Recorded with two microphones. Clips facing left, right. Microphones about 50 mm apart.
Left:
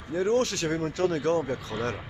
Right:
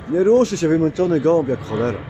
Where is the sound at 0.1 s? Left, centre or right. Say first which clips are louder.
Right 11 dB; right.